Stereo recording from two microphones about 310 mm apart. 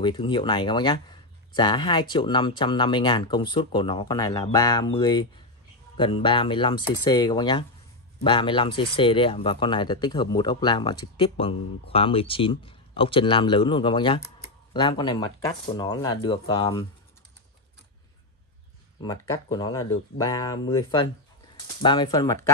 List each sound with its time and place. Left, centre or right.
0.0 s speech: centre
18.9 s speech: centre